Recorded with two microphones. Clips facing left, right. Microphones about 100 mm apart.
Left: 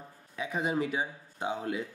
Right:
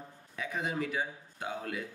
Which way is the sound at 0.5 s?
20° left (ahead or behind).